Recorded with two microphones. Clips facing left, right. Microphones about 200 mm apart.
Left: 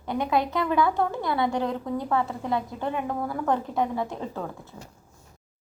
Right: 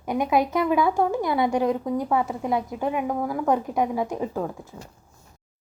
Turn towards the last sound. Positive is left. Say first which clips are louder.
# right 5 dB
turn(degrees=-15)  # may be behind; listen again after turning